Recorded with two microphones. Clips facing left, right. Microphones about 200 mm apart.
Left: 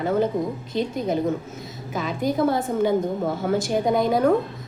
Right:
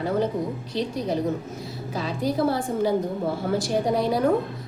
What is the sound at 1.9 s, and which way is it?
A woman's voice, 35° right (ahead or behind).